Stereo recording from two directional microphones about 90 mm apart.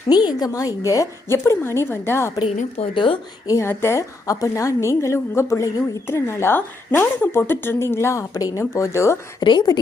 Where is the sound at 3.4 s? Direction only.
30° left (ahead or behind).